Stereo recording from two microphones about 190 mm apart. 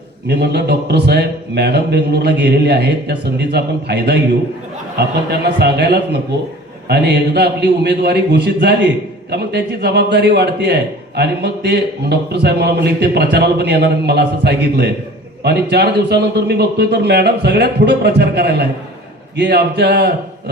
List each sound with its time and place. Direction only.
0.3 s a man's voice: 60° right (ahead or behind)
5.3 s a man's voice: 60° right (ahead or behind)